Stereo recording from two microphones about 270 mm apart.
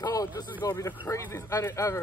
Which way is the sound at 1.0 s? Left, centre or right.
Centre.